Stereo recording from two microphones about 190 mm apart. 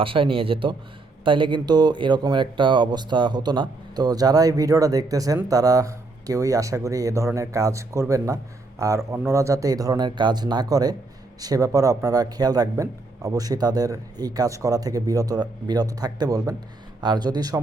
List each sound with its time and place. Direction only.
0.0 s speech: 30° right (ahead or behind)